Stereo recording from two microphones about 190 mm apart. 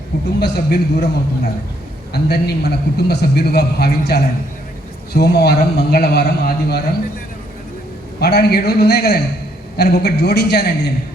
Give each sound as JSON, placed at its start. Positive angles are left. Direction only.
{"t": 0.3, "sound": "a man's voice", "side_deg": 60}
{"t": 2.1, "sound": "a man's voice", "side_deg": 55}
{"t": 8.2, "sound": "a man's voice", "side_deg": 55}